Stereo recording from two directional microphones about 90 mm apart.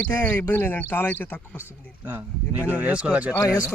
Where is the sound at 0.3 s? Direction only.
30° left (ahead or behind).